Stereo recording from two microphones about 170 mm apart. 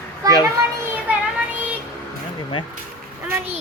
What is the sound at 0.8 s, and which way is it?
Child singing, 10° right (ahead or behind).